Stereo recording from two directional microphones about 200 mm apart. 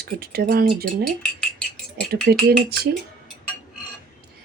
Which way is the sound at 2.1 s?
45° right (ahead or behind).